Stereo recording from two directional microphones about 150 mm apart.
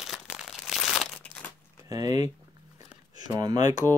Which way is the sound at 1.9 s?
25° right (ahead or behind).